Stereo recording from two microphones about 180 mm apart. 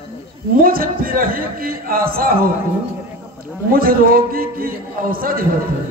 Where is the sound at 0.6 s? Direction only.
55° right (ahead or behind).